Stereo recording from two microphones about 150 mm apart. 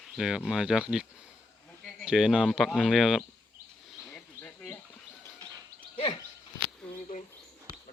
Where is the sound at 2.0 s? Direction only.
5° right (ahead or behind).